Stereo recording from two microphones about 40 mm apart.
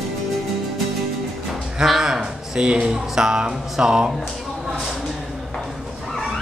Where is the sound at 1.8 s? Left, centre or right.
Centre.